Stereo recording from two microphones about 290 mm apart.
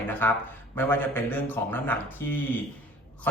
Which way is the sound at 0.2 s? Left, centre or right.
Centre.